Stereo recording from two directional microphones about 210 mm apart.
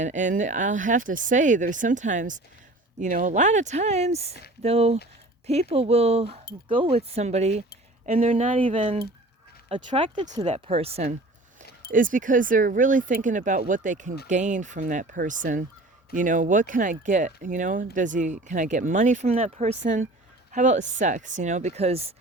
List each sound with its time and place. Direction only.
0.0 s speech: 35° right (ahead or behind)